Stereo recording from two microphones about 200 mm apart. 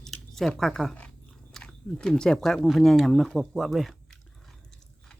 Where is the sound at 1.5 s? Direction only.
5° left (ahead or behind).